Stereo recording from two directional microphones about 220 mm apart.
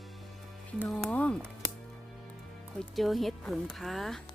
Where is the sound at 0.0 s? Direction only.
Centre (ahead or behind).